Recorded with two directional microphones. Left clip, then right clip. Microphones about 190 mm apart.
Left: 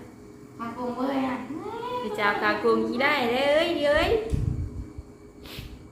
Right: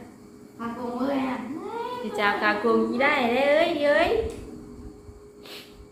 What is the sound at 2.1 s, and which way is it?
A woman's voice, 5° left (ahead or behind).